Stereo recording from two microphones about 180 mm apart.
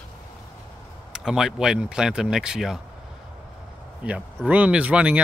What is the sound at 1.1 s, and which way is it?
Speech, centre (ahead or behind).